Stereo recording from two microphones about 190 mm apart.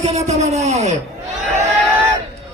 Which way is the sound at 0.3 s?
35° right (ahead or behind).